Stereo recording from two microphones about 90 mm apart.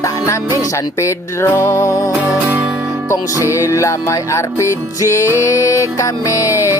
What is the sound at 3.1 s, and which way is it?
Music, 30° left (ahead or behind).